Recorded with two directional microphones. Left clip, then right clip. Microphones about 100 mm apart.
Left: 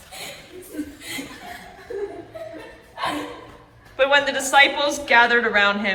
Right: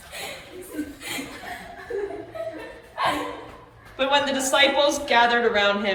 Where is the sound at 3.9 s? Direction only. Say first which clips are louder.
Left 4 dB; 25° right (ahead or behind).